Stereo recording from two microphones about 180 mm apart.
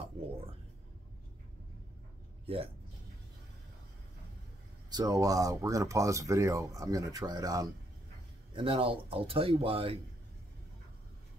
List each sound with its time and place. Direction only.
2.4 s speech: 30° right (ahead or behind)
4.8 s speech: 20° right (ahead or behind)
8.5 s speech: 30° right (ahead or behind)